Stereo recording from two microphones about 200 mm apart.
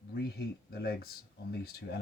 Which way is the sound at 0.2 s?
50° left (ahead or behind).